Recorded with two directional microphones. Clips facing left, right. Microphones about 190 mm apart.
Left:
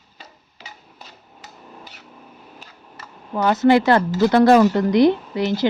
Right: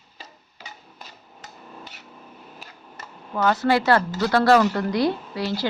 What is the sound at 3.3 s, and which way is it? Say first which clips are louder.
A woman's voice: left 5 dB; 20° left (ahead or behind).